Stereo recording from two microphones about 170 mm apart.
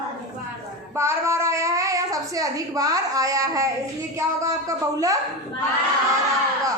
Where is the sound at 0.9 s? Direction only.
15° right (ahead or behind).